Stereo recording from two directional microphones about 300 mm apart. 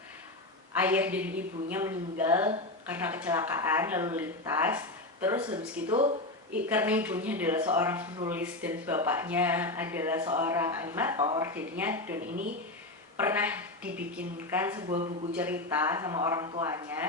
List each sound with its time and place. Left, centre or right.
0.8 s speech: centre
6.7 s speech: centre
12.3 s speech: right
13.1 s speech: centre